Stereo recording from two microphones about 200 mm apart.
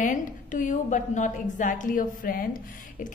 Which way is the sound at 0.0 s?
40° left (ahead or behind).